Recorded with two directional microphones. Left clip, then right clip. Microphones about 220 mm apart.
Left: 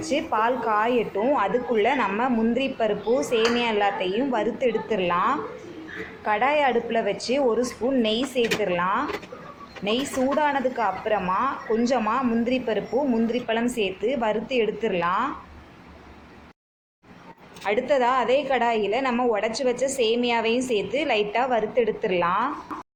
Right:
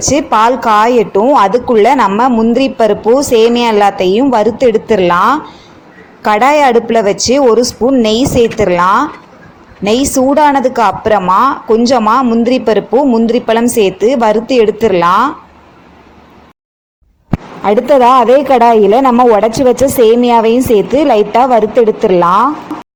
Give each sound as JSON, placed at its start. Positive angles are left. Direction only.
{"t": 0.1, "sound": "a woman's voice", "side_deg": -35}
{"t": 17.7, "sound": "speech", "side_deg": -40}